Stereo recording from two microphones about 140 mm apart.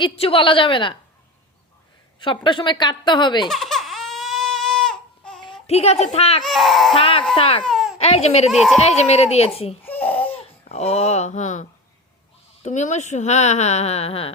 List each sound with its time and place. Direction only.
0.0 s a woman's voice: 40° left (ahead or behind)
2.2 s a woman's voice: 35° left (ahead or behind)
3.5 s baby cry: 5° left (ahead or behind)
5.6 s speech: 50° left (ahead or behind)
6.4 s speech: centre (ahead or behind)
6.9 s a woman's voice: 40° left (ahead or behind)
7.6 s baby cry: centre (ahead or behind)
7.9 s speech: 45° left (ahead or behind)
8.4 s speech: centre (ahead or behind)
8.8 s speech: 50° left (ahead or behind)
9.8 s baby cry: 10° left (ahead or behind)
10.7 s speech: 50° left (ahead or behind)
12.6 s speech: 55° left (ahead or behind)